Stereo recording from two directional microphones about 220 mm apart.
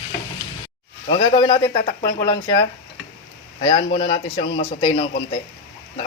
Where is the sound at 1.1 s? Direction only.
25° left (ahead or behind).